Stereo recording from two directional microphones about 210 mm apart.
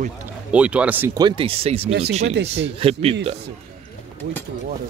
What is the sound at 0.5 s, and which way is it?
Speech, 5° right (ahead or behind).